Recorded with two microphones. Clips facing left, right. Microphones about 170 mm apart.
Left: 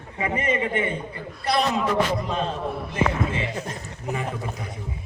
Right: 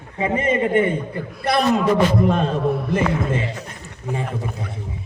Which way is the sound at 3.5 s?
35° left (ahead or behind).